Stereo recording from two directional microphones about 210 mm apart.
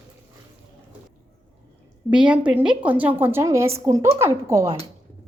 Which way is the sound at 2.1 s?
5° right (ahead or behind).